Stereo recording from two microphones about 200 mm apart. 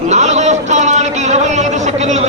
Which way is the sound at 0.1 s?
35° right (ahead or behind).